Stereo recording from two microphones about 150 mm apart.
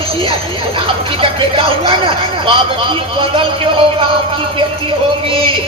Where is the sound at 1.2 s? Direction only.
35° right (ahead or behind).